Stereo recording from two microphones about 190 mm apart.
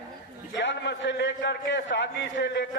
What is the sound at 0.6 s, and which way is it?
A man's voice, 70° left (ahead or behind).